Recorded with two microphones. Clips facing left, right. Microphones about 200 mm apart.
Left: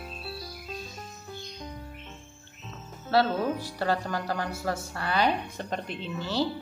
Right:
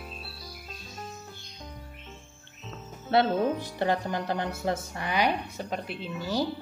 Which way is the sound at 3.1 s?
20° right (ahead or behind).